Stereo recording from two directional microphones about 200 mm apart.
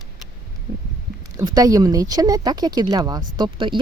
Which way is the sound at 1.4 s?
20° right (ahead or behind).